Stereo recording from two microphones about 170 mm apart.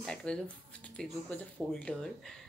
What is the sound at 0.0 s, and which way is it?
Speech, 5° left (ahead or behind).